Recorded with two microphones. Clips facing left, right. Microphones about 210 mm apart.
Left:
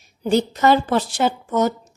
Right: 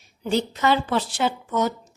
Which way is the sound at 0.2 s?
40° left (ahead or behind).